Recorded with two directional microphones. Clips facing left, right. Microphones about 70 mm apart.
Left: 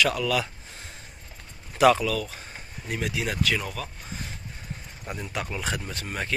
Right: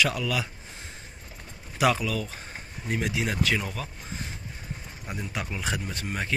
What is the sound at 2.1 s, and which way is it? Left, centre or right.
Speech, right.